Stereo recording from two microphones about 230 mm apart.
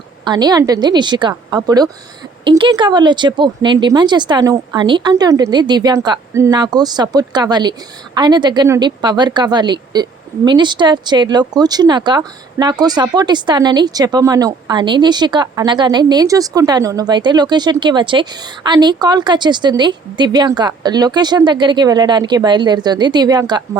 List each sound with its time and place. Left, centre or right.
0.3 s a woman's voice: centre